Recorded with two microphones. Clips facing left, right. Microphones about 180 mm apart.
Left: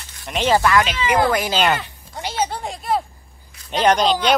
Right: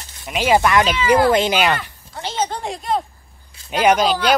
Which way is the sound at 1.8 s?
20° left (ahead or behind).